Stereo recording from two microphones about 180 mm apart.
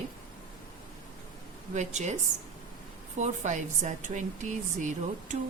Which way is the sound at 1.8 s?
40° right (ahead or behind).